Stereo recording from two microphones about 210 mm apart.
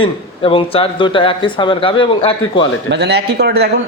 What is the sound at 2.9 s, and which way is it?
Speech, 50° right (ahead or behind).